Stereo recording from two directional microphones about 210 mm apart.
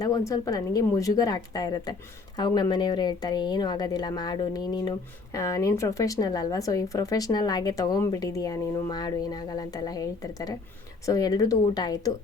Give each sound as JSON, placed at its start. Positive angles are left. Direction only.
{"t": 0.0, "sound": "speech", "side_deg": 15}